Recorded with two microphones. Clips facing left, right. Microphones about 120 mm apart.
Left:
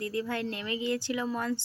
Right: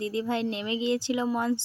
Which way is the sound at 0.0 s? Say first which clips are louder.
Right 4 dB; 20° right (ahead or behind).